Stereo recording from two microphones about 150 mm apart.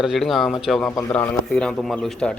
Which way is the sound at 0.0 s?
Centre (ahead or behind).